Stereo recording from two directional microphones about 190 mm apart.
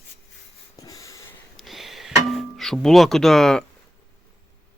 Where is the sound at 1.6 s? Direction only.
Centre (ahead or behind).